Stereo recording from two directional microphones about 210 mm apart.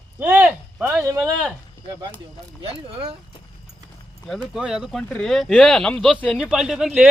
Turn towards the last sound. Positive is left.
turn(degrees=-5)  # may be behind; listen again after turning